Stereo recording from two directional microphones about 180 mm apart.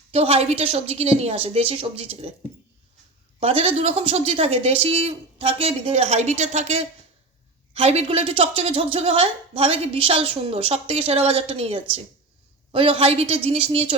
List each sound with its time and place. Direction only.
0.1 s a woman's voice: 35° right (ahead or behind)
3.4 s a woman's voice: 35° right (ahead or behind)